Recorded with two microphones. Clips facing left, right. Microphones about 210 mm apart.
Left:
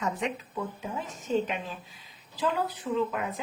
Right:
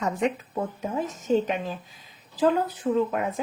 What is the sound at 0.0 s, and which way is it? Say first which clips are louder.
Speech: right 5 dB; 45° right (ahead or behind).